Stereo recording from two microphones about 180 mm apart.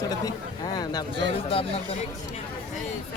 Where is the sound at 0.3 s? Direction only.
20° left (ahead or behind).